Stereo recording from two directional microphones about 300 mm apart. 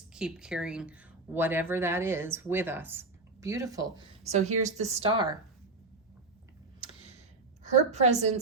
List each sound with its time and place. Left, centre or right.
0.1 s speech: centre
3.9 s speech: right
6.7 s tick: centre
7.6 s speech: right